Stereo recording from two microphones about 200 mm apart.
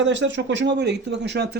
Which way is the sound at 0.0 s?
65° right (ahead or behind).